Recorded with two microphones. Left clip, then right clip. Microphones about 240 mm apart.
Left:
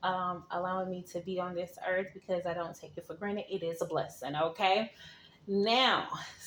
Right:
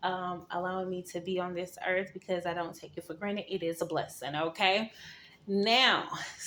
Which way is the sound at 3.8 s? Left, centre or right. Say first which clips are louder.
Right 1 dB; right.